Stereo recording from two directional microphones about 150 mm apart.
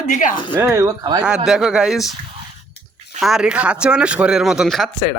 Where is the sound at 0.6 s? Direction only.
15° right (ahead or behind).